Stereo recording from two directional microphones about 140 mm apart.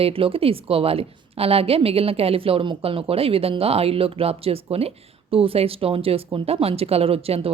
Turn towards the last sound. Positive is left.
turn(degrees=-45)  # may be behind; listen again after turning